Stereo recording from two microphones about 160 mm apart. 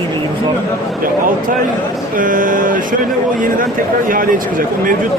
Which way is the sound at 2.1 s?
55° right (ahead or behind).